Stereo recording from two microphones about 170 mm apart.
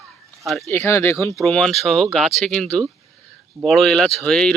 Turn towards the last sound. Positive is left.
turn(degrees=5)  # may be behind; listen again after turning